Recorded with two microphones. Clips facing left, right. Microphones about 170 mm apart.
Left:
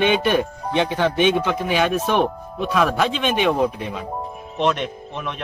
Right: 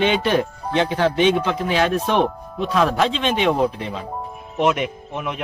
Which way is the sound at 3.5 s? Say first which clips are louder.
Even; 10° left (ahead or behind).